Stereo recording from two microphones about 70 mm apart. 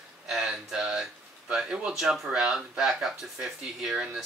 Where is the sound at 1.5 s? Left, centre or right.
Centre.